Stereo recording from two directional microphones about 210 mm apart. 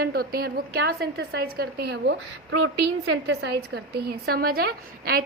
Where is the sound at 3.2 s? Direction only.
50° right (ahead or behind).